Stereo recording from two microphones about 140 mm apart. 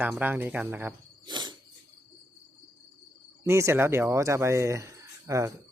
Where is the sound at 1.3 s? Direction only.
30° right (ahead or behind).